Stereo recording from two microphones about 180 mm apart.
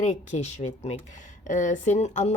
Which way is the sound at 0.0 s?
40° left (ahead or behind).